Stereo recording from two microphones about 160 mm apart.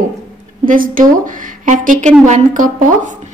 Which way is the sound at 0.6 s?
60° right (ahead or behind).